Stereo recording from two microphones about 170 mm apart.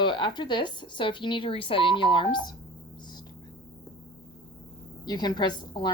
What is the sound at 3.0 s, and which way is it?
Whispering, 25° left (ahead or behind).